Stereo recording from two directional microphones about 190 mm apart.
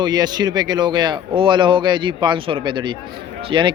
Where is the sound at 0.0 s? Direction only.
20° right (ahead or behind).